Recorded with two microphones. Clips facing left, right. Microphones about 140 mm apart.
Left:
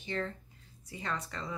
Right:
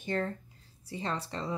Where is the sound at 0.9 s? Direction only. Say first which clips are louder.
Right 3 dB; 30° right (ahead or behind).